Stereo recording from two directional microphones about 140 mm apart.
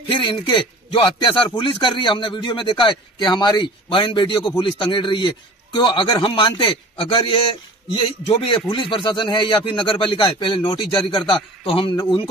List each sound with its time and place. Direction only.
0.1 s a man's voice: 35° left (ahead or behind)